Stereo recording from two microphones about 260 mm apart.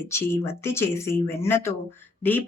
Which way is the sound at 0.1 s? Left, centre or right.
Centre.